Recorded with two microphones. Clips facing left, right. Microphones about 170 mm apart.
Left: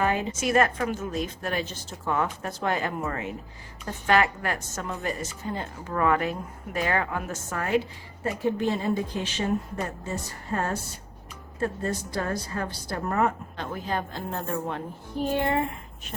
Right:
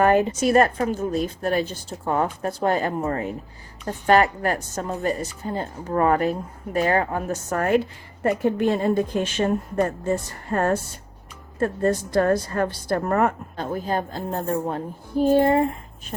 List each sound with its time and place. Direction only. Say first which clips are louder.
0.0 s a sound: right 8 dB; 50° right (ahead or behind)
0.3 s a woman's voice: right 5 dB; 35° right (ahead or behind); by 13.7 s 50° right (ahead or behind)
13.7 s a woman's voice: right 5 dB; 40° right (ahead or behind)